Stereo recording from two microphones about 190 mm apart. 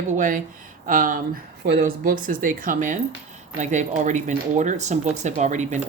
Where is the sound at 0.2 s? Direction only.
45° right (ahead or behind).